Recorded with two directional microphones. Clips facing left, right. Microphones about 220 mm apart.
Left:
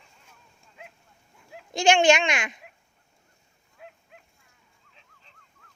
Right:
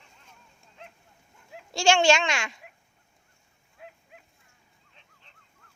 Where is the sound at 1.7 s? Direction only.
20° left (ahead or behind).